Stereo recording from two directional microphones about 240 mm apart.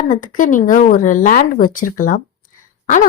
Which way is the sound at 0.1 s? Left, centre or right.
Left.